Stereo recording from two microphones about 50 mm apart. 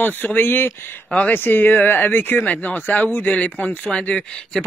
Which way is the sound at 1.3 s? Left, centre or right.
Left.